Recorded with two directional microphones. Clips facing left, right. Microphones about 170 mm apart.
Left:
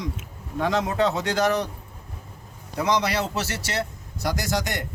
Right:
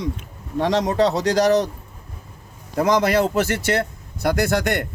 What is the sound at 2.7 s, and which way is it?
A man's voice, 50° right (ahead or behind).